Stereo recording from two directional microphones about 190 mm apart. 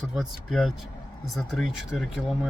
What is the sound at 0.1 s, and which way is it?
Speech, centre (ahead or behind).